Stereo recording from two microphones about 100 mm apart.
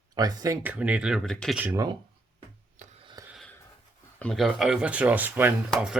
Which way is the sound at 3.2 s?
40° right (ahead or behind).